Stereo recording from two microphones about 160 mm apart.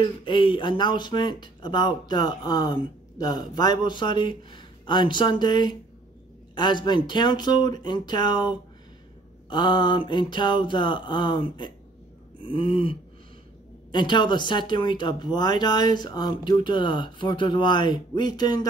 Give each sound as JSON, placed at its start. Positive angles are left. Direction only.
{"t": 0.0, "sound": "speech", "side_deg": 30}
{"t": 12.4, "sound": "throat clearing", "side_deg": 35}
{"t": 13.9, "sound": "speech", "side_deg": 30}